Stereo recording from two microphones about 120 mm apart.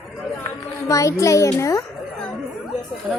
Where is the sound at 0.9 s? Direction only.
25° left (ahead or behind).